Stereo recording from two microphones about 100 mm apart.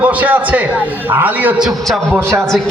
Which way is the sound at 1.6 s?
5° right (ahead or behind).